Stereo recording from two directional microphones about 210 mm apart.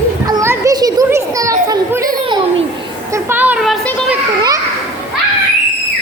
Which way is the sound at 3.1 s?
10° right (ahead or behind).